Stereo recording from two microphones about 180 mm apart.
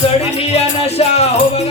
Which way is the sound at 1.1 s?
35° left (ahead or behind).